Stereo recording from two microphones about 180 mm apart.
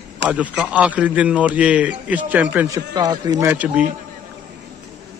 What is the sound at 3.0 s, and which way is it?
Speech, 20° right (ahead or behind).